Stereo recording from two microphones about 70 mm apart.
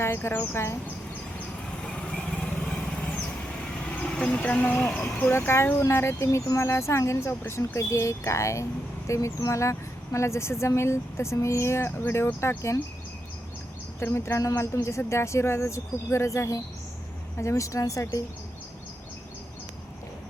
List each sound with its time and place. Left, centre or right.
0.0 s speech: left
1.9 s vehicle: centre
4.2 s speech: centre
5.3 s speech: left
5.9 s speech: left
14.0 s speech: left